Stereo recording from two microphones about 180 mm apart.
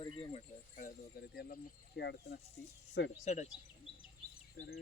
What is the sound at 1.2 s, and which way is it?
Speech, 55° left (ahead or behind).